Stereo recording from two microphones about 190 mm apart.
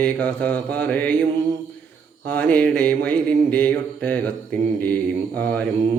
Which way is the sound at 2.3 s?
10° left (ahead or behind).